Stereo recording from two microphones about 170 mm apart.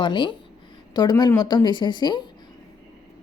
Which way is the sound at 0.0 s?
30° left (ahead or behind).